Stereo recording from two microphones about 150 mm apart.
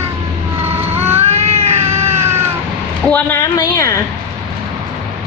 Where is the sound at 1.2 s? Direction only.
45° right (ahead or behind).